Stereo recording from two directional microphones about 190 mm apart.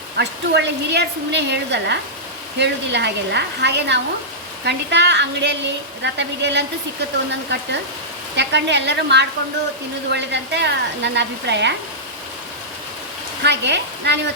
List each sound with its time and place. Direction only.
0.2 s a woman's voice: 65° right (ahead or behind)
13.4 s a woman's voice: 65° right (ahead or behind)